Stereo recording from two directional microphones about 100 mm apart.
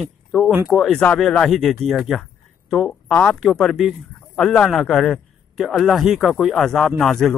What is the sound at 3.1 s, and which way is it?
Speech, 15° left (ahead or behind).